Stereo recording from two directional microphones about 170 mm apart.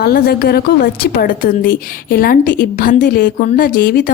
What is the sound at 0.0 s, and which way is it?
Speech, 65° left (ahead or behind).